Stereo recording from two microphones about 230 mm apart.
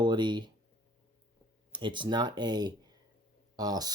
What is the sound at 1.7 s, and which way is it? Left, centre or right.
Speech, right.